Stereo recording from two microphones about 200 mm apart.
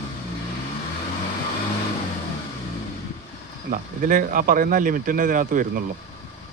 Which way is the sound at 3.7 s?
45° right (ahead or behind).